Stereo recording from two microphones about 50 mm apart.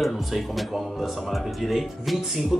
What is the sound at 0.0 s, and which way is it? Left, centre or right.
Speech, centre.